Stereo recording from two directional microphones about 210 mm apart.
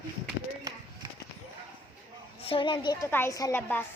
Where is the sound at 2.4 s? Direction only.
25° left (ahead or behind); by 3.8 s 10° left (ahead or behind).